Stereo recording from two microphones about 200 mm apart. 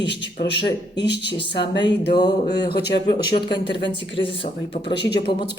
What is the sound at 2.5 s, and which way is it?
Speech, 55° left (ahead or behind).